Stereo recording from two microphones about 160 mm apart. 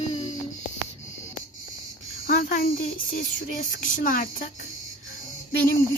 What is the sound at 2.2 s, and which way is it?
Speech, 65° left (ahead or behind).